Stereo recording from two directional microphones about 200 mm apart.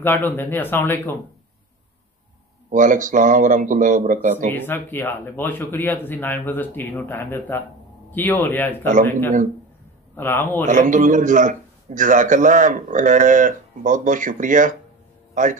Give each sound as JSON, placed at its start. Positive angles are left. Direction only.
{"t": 0.0, "sound": "speech", "side_deg": 10}
{"t": 2.7, "sound": "a man's voice", "side_deg": -40}
{"t": 4.6, "sound": "speech", "side_deg": 10}
{"t": 10.1, "sound": "speech", "side_deg": 10}
{"t": 10.7, "sound": "a man's voice", "side_deg": -40}